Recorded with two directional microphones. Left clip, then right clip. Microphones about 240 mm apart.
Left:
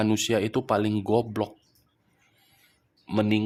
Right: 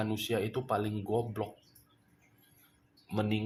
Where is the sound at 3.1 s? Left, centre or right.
Left.